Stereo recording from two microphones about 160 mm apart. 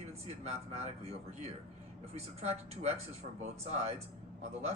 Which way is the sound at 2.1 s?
40° right (ahead or behind).